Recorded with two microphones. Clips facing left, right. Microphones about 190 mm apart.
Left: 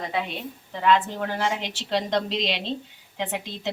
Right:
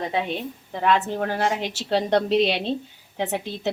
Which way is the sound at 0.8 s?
45° right (ahead or behind).